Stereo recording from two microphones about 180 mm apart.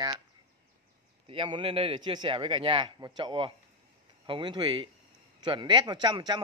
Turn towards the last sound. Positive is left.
turn(degrees=-25)  # may be behind; listen again after turning